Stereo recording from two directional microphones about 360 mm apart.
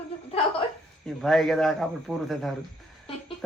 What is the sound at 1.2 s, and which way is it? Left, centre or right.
A man's voice, centre.